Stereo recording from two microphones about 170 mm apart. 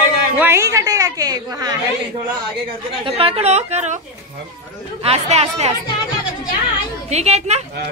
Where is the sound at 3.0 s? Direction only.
30° right (ahead or behind).